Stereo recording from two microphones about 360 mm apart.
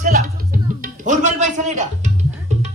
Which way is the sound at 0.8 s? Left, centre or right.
Right.